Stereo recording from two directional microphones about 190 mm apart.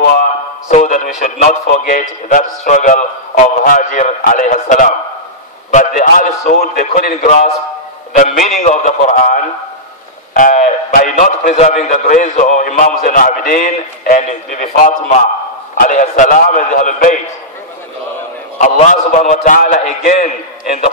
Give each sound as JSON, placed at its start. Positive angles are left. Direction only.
{"t": 0.0, "sound": "a man's voice", "side_deg": 40}
{"t": 18.6, "sound": "a man's voice", "side_deg": 40}